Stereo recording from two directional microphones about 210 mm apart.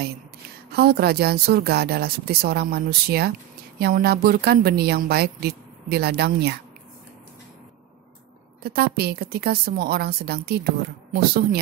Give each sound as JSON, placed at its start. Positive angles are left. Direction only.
{"t": 0.7, "sound": "a woman's voice", "side_deg": -50}
{"t": 8.6, "sound": "a woman's voice", "side_deg": -50}